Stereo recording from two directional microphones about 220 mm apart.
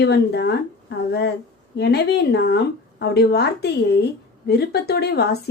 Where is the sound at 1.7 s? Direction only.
50° left (ahead or behind).